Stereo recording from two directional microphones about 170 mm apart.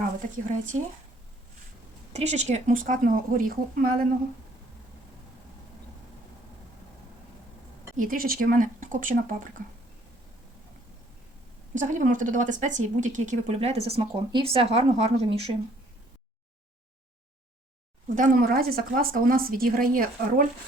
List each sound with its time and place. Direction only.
0.0 s speech: 50° right (ahead or behind)
2.1 s speech: 40° right (ahead or behind); by 4.0 s 60° right (ahead or behind)
7.9 s speech: 55° right (ahead or behind)
11.7 s speech: 50° right (ahead or behind)
18.1 s a woman's voice: 55° right (ahead or behind)